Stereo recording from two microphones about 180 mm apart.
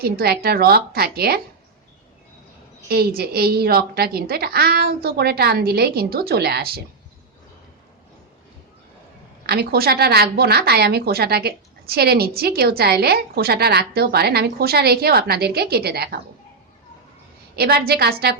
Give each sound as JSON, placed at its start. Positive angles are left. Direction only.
{"t": 0.0, "sound": "a woman's voice", "side_deg": -60}
{"t": 2.9, "sound": "a woman's voice", "side_deg": -60}
{"t": 9.5, "sound": "a woman's voice", "side_deg": -60}
{"t": 17.6, "sound": "a woman's voice", "side_deg": -60}